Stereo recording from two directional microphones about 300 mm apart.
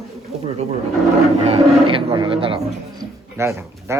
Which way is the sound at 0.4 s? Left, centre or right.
Right.